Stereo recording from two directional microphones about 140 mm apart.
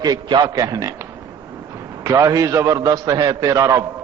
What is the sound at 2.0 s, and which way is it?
A man's voice, 25° right (ahead or behind).